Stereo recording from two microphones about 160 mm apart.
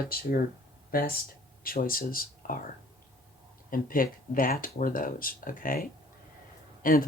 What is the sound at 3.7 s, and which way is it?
Speech, 60° left (ahead or behind).